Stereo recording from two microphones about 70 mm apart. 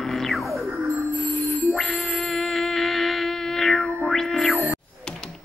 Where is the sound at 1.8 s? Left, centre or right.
Centre.